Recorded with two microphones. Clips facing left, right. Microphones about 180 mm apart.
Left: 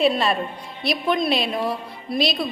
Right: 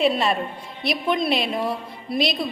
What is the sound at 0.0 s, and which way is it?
Speech, 20° right (ahead or behind).